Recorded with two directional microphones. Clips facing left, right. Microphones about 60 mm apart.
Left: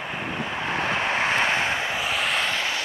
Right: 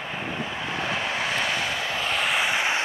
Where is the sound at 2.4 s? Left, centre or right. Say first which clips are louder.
Right 2 dB; centre.